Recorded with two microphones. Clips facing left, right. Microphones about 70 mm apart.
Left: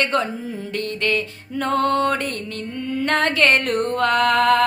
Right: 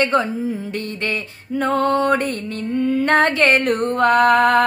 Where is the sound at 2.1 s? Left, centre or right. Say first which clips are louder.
Right 4 dB; right.